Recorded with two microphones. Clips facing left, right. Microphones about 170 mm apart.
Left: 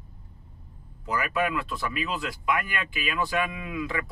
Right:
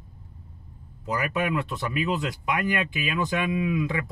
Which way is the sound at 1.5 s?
20° right (ahead or behind).